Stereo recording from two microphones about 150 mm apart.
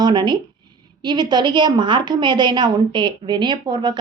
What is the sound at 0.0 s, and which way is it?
A woman's voice, 30° right (ahead or behind).